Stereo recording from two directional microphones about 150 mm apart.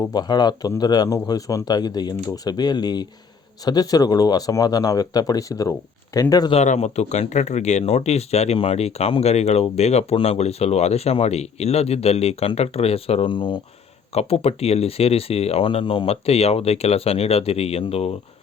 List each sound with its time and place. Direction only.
0.1 s speech: 30° left (ahead or behind)
6.5 s speech: 45° left (ahead or behind)